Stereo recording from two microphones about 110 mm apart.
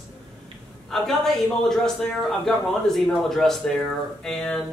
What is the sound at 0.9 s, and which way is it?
A man's voice, centre (ahead or behind).